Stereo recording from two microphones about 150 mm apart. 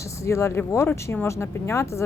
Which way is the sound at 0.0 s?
20° left (ahead or behind).